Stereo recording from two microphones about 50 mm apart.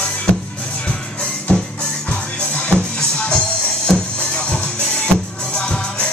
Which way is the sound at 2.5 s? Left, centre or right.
Centre.